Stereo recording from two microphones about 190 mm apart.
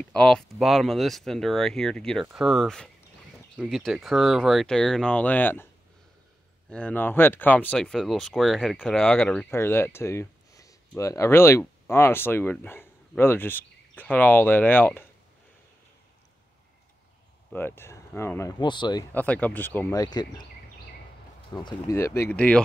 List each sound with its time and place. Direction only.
0.1 s speech: 5° left (ahead or behind)
6.7 s speech: 5° left (ahead or behind)
17.5 s speech: 10° left (ahead or behind)
18.6 s speech: 25° left (ahead or behind)
19.1 s speech: 5° left (ahead or behind)
21.5 s speech: 20° left (ahead or behind)